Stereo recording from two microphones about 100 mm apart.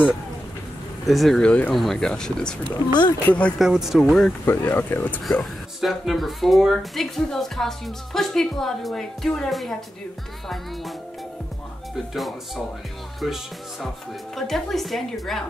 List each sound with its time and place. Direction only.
1.0 s speech: centre (ahead or behind)
2.9 s speech: 45° left (ahead or behind)
3.3 s speech: 15° left (ahead or behind)
3.5 s speech: 5° right (ahead or behind)
4.5 s speech: 20° left (ahead or behind)
5.2 s speech: 5° left (ahead or behind)
11.9 s speech: centre (ahead or behind)
13.2 s music: centre (ahead or behind)
14.3 s speech: 5° left (ahead or behind)